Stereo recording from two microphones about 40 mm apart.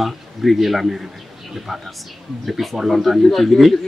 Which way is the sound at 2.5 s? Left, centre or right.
Centre.